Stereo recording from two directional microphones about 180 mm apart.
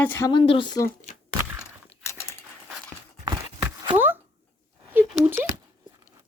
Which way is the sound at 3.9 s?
10° right (ahead or behind).